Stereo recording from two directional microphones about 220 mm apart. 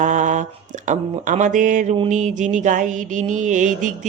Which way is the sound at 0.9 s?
35° right (ahead or behind).